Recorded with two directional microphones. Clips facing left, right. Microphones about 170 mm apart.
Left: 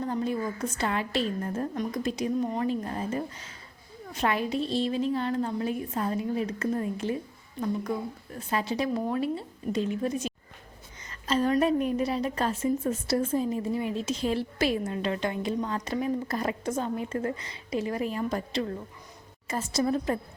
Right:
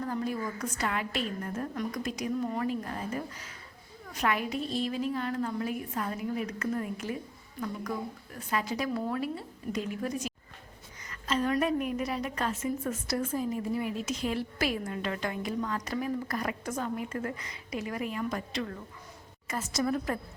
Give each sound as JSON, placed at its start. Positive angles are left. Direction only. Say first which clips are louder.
{"t": 0.0, "sound": "a woman's voice", "louder": "left 3 dB", "side_deg": 25}